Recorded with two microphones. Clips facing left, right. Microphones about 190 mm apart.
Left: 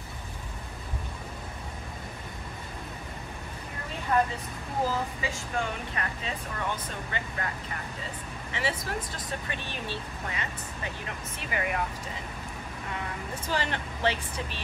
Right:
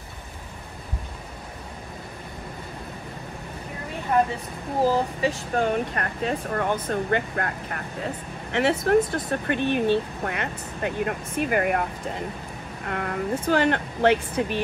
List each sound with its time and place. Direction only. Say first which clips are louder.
4.9 s speech: right 8 dB; 35° right (ahead or behind)
5.9 s speech: right 8 dB; 55° right (ahead or behind)
12.8 s speech: right 10 dB; 60° right (ahead or behind)